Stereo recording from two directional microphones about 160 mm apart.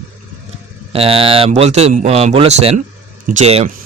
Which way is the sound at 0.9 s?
35° right (ahead or behind).